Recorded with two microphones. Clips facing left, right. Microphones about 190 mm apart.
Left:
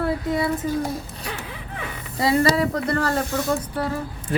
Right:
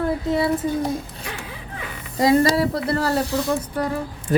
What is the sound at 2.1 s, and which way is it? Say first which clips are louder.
Speech: right 3 dB; 40° right (ahead or behind).